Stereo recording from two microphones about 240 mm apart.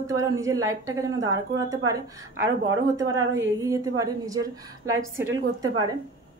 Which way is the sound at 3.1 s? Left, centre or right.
Right.